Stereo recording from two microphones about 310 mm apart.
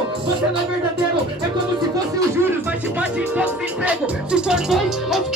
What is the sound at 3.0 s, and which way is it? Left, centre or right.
Music, centre.